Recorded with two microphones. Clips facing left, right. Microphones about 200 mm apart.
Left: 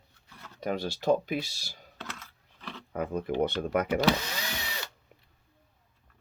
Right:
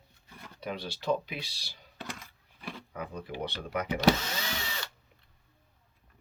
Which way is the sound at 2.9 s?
50° left (ahead or behind).